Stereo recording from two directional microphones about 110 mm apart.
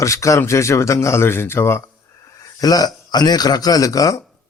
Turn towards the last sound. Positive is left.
turn(degrees=30)  # may be behind; listen again after turning